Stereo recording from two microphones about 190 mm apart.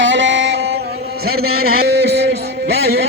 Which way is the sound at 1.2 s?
55° right (ahead or behind).